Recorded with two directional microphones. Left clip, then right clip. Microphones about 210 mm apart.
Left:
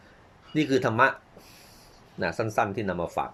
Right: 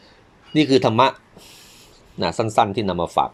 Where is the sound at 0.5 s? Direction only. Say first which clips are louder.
Right 7 dB; 25° right (ahead or behind).